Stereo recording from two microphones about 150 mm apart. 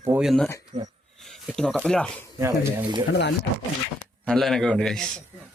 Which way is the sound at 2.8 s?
30° right (ahead or behind).